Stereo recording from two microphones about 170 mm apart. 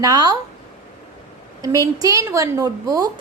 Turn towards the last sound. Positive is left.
turn(degrees=-20)  # may be behind; listen again after turning